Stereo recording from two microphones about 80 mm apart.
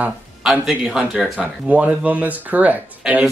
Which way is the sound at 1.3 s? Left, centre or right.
Centre.